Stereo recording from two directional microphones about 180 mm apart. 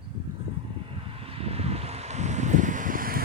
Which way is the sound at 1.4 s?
35° right (ahead or behind).